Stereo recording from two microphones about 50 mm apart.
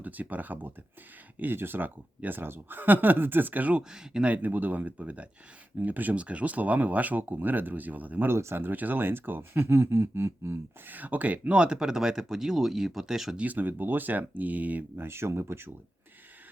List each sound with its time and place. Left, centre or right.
0.0 s speech: right
3.8 s speech: centre
4.3 s speech: right
8.3 s speech: right
8.6 s speech: right
10.8 s speech: right; by 13.3 s centre
13.3 s speech: right
14.9 s speech: right